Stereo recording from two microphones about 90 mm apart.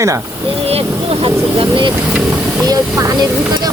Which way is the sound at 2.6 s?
40° right (ahead or behind).